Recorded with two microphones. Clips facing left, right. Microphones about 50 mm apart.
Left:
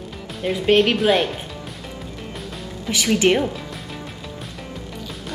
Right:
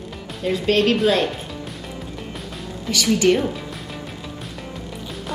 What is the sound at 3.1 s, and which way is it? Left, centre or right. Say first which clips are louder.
Speech: even; left.